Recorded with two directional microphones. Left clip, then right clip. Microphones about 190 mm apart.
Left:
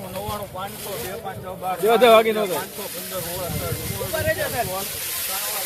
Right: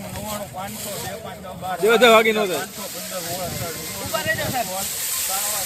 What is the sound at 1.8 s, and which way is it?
Speech, centre (ahead or behind).